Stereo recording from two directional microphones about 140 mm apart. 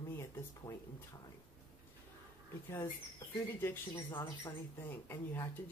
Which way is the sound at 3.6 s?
15° left (ahead or behind).